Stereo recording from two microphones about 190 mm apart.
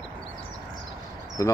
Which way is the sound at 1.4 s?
20° left (ahead or behind).